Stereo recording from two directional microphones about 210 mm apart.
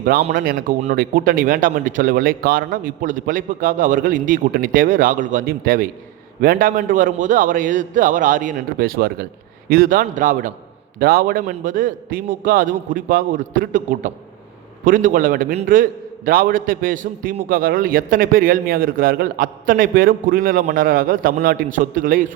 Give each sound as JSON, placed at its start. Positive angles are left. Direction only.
{"t": 0.0, "sound": "a man's voice", "side_deg": -40}